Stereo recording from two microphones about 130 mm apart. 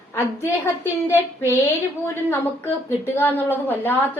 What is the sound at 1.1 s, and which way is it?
A woman's voice, 20° left (ahead or behind).